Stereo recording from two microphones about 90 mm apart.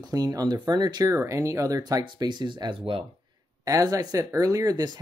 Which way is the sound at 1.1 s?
35° right (ahead or behind).